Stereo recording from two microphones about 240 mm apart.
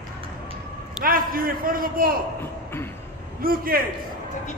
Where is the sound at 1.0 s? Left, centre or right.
Right.